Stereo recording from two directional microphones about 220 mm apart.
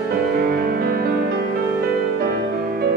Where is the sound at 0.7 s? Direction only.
45° right (ahead or behind).